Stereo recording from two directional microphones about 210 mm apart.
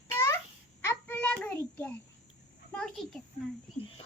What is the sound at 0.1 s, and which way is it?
Babbling, 10° left (ahead or behind).